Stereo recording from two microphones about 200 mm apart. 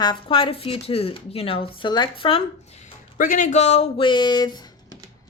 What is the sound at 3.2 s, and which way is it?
Speech, 40° left (ahead or behind).